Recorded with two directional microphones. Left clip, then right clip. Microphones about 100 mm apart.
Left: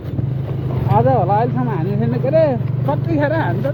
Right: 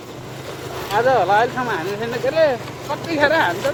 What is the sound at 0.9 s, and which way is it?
Speech, 25° right (ahead or behind).